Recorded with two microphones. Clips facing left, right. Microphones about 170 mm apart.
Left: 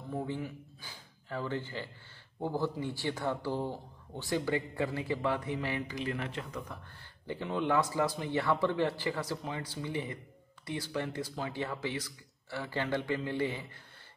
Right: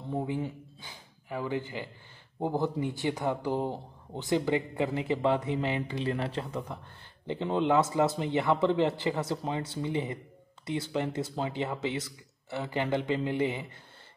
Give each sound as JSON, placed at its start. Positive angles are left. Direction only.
{"t": 0.1, "sound": "speech", "side_deg": -20}